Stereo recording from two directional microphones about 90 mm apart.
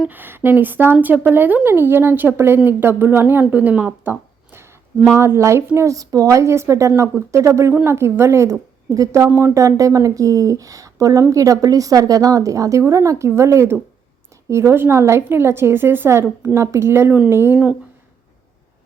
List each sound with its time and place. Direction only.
0.1 s a woman's voice: 20° right (ahead or behind)
17.5 s speech: 10° right (ahead or behind)